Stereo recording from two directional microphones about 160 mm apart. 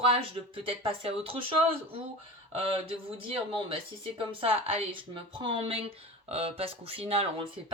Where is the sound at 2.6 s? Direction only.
35° right (ahead or behind).